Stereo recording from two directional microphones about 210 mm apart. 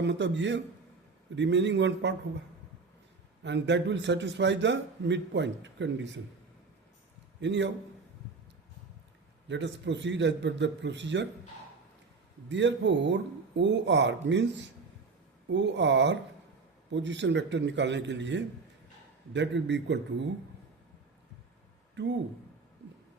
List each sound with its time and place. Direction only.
0.0 s a man's voice: 55° right (ahead or behind)
3.4 s a man's voice: 55° right (ahead or behind)
7.4 s a man's voice: 55° right (ahead or behind)
9.5 s a man's voice: 55° right (ahead or behind)
12.5 s a man's voice: 55° right (ahead or behind)